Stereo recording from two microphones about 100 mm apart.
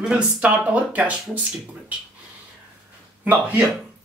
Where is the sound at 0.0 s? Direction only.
10° right (ahead or behind).